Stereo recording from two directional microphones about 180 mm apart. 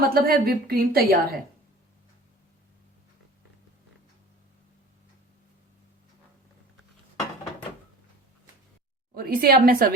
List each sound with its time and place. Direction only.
0.1 s a woman's voice: 60° right (ahead or behind)
9.1 s a woman's voice: 55° right (ahead or behind)